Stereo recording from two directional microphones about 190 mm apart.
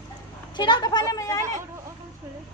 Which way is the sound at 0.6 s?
25° left (ahead or behind).